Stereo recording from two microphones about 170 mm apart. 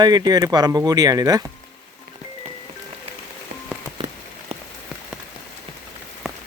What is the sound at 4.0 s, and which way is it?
Rain on surface, 30° right (ahead or behind).